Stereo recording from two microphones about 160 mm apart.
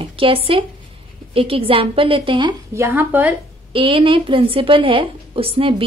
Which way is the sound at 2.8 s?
15° right (ahead or behind).